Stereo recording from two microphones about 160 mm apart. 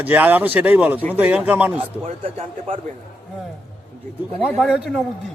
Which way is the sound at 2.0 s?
35° right (ahead or behind).